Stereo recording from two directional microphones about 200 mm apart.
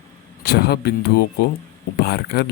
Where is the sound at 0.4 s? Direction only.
55° left (ahead or behind).